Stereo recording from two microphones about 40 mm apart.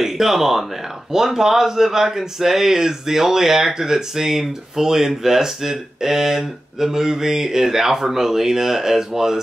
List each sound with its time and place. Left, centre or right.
0.0 s speech: centre